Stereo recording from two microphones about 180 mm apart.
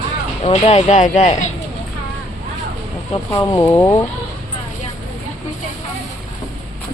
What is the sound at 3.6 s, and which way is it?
Speech, 15° left (ahead or behind).